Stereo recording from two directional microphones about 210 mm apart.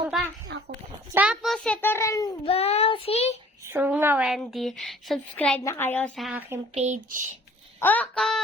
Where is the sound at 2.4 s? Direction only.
30° left (ahead or behind).